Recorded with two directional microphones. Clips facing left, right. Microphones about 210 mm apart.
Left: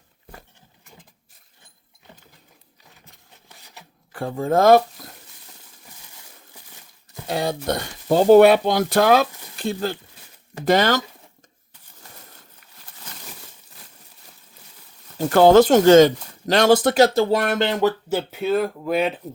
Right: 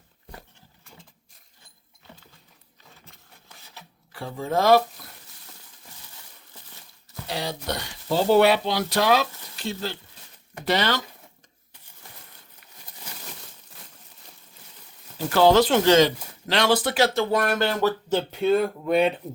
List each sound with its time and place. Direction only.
4.1 s speech: 50° left (ahead or behind)
6.5 s a sound: 15° left (ahead or behind)
7.3 s speech: 50° left (ahead or behind)
13.1 s a sound: 10° right (ahead or behind)
15.3 s speech: 50° left (ahead or behind)
17.3 s speech: 25° left (ahead or behind)
18.1 s speech: 5° left (ahead or behind)